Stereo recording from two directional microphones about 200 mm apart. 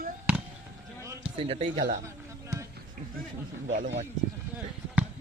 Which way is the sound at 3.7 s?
35° right (ahead or behind).